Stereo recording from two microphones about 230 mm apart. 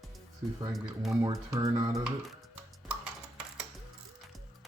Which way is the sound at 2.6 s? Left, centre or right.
Centre.